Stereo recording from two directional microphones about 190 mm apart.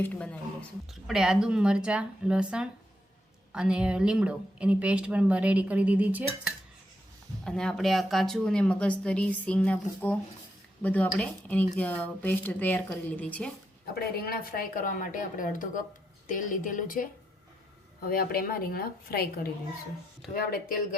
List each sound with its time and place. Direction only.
0.0 s a woman's voice: 10° left (ahead or behind); by 6.2 s 10° right (ahead or behind)
7.4 s a woman's voice: 5° left (ahead or behind)
14.2 s a woman's voice: 55° left (ahead or behind)